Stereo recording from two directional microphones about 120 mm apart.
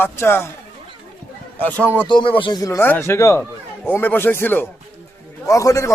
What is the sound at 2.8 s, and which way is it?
A man's voice, 15° left (ahead or behind).